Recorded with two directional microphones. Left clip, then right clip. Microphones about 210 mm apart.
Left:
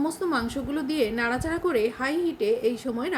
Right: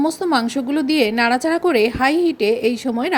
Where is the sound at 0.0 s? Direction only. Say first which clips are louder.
Right 8 dB; 40° right (ahead or behind).